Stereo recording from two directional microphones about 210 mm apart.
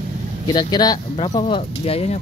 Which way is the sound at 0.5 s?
20° left (ahead or behind).